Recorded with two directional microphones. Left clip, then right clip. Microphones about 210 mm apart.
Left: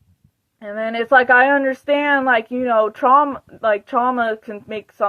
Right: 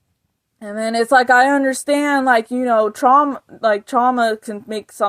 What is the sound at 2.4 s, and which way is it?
Speech, 55° right (ahead or behind).